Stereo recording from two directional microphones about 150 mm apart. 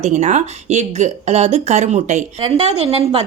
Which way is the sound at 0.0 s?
50° right (ahead or behind).